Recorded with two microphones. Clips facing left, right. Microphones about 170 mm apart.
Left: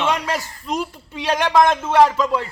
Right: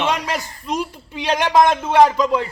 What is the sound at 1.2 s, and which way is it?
A man's voice, 15° right (ahead or behind).